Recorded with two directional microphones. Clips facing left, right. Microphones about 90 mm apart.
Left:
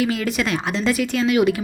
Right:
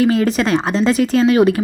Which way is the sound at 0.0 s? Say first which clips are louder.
Right 7 dB; 35° right (ahead or behind).